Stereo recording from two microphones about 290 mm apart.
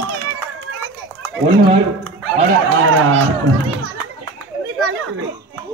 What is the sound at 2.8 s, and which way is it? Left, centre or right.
Speech, right.